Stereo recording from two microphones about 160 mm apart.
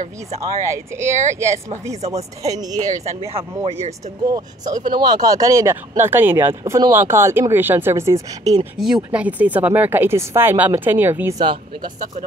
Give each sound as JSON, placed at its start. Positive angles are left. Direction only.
{"t": 0.4, "sound": "speech", "side_deg": -15}
{"t": 2.0, "sound": "speech", "side_deg": -40}
{"t": 2.4, "sound": "speech", "side_deg": -20}
{"t": 3.3, "sound": "speech", "side_deg": -40}
{"t": 4.3, "sound": "speech", "side_deg": -25}
{"t": 8.7, "sound": "speech", "side_deg": -5}
{"t": 11.3, "sound": "speech", "side_deg": -30}